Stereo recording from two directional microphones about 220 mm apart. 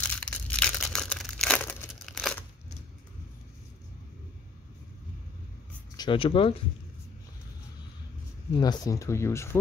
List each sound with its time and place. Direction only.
0.0 s crushing: 5° left (ahead or behind)
5.9 s speech: 25° left (ahead or behind)
8.5 s speech: 15° left (ahead or behind)